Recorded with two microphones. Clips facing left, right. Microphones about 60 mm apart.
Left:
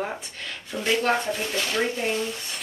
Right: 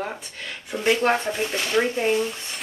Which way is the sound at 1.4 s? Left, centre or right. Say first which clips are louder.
Right 3 dB; centre.